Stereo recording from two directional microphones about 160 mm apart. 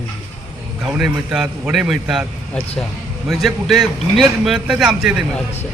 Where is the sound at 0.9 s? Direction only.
5° right (ahead or behind).